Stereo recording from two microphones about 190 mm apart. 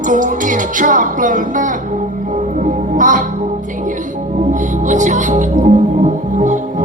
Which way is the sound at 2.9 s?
45° right (ahead or behind).